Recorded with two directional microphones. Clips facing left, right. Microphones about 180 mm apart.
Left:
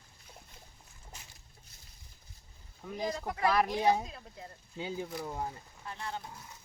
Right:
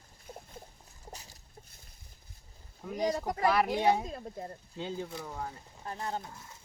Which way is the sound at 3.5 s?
5° right (ahead or behind).